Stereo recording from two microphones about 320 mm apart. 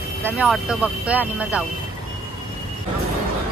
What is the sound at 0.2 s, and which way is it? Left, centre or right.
Speech, centre.